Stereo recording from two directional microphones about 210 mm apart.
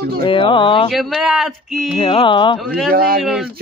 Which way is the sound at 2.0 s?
25° left (ahead or behind).